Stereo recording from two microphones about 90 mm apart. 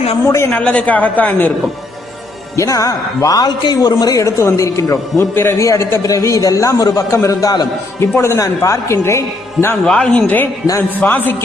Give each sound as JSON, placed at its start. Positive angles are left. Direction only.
{"t": 0.3, "sound": "a man's voice", "side_deg": 35}
{"t": 0.5, "sound": "a woman's voice", "side_deg": 15}
{"t": 2.6, "sound": "a man's voice", "side_deg": 40}
{"t": 9.8, "sound": "a woman's voice", "side_deg": 10}
{"t": 10.2, "sound": "a man's voice", "side_deg": 20}